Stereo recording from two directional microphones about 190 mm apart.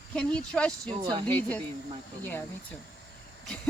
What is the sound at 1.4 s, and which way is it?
Speech, 10° left (ahead or behind).